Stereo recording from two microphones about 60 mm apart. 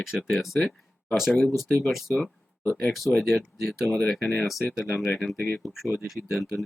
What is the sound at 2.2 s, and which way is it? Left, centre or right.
Speech, left.